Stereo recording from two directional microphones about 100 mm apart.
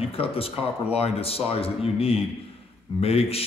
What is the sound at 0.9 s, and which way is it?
Speech, 80° left.